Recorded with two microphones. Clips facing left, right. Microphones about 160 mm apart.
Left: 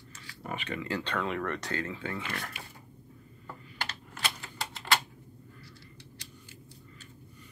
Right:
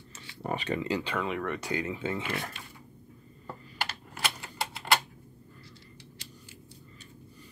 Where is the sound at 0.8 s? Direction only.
10° right (ahead or behind).